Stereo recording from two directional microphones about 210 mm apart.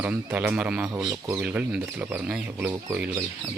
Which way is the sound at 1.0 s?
20° right (ahead or behind).